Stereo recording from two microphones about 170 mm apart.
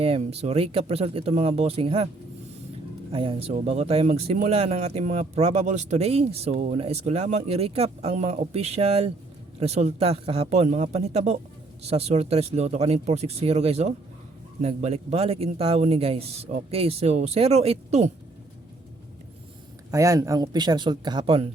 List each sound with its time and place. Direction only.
0.0 s speech: 35° right (ahead or behind)
3.1 s speech: 30° right (ahead or behind)
19.9 s speech: 20° right (ahead or behind); by 21.5 s 35° right (ahead or behind)